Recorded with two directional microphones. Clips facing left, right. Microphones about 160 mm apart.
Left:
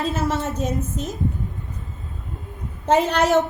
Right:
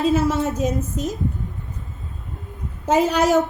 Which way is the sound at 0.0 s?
10° right (ahead or behind).